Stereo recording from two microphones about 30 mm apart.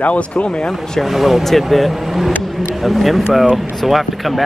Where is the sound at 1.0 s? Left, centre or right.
Centre.